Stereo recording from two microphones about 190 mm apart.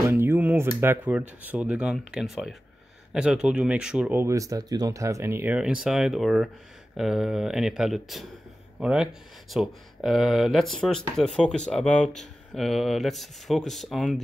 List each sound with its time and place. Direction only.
0.1 s speech: 10° right (ahead or behind)